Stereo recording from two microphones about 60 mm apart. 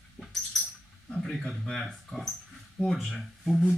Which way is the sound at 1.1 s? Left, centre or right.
Centre.